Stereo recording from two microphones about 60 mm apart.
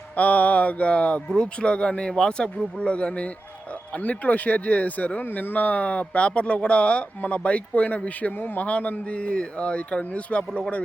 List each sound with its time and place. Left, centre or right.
0.2 s a man's voice: left